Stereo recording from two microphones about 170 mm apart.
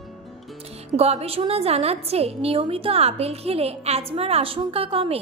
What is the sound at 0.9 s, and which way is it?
A woman's voice, 35° right (ahead or behind).